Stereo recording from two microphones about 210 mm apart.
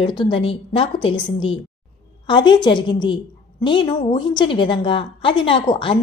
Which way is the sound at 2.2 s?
20° left (ahead or behind).